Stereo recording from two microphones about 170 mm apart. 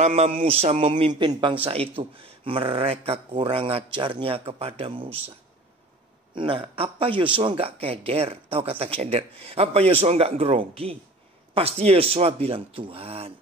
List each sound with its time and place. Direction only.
0.0 s speech: 35° right (ahead or behind)
6.3 s speech: 30° right (ahead or behind)